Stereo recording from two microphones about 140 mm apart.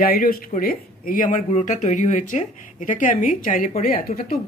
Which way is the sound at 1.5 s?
60° left (ahead or behind).